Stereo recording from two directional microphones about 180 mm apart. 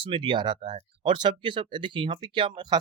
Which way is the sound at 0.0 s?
25° right (ahead or behind).